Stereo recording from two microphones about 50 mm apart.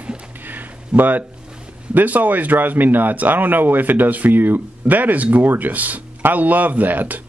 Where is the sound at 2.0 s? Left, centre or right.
Right.